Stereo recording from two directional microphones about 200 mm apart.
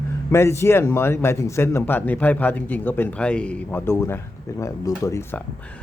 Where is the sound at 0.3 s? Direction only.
15° left (ahead or behind).